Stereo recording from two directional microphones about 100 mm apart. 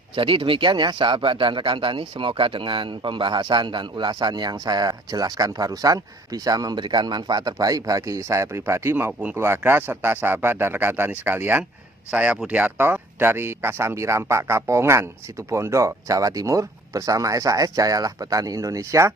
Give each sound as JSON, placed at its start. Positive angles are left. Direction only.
{"t": 0.2, "sound": "speech", "side_deg": -60}